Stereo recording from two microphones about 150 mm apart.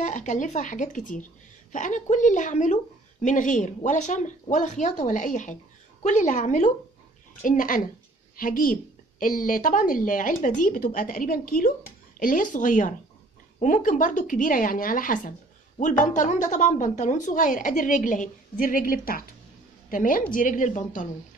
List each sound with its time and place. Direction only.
0.0 s a woman's voice: 55° left (ahead or behind)